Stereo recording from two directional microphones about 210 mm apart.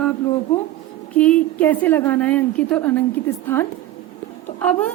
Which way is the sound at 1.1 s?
5° left (ahead or behind).